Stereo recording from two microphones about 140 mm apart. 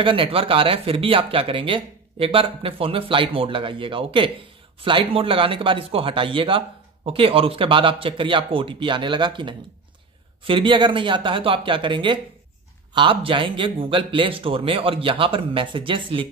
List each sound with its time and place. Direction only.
0.0 s speech: 40° right (ahead or behind)